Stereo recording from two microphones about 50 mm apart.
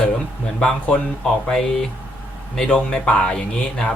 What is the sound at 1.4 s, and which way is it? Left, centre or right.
A man's voice, centre.